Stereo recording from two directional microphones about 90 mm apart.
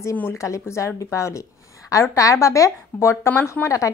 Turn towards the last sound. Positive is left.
turn(degrees=35)  # may be behind; listen again after turning